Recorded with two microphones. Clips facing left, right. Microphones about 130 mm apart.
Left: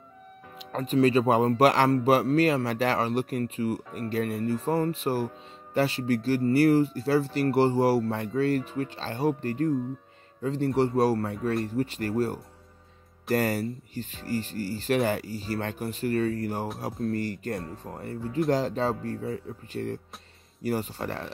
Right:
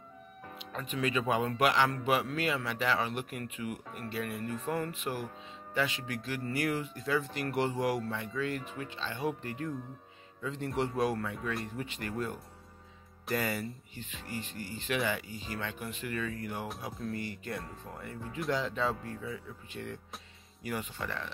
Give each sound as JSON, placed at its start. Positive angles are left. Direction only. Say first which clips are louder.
{"t": 0.6, "sound": "a man's voice", "louder": "left 12 dB", "side_deg": 40}